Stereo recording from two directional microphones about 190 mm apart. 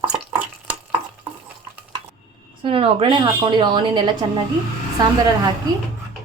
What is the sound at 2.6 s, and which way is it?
Speech, 30° right (ahead or behind).